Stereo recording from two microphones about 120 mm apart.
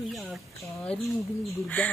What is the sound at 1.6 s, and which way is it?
Speech, 10° left (ahead or behind).